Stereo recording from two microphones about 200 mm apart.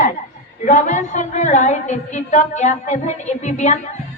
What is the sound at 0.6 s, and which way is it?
A woman's voice, 40° left (ahead or behind).